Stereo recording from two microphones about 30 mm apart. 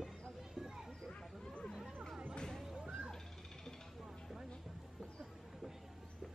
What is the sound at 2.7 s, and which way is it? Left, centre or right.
Music, right.